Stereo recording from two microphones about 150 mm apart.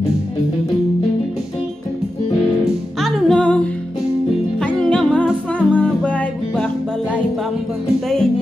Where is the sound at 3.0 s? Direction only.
Centre (ahead or behind).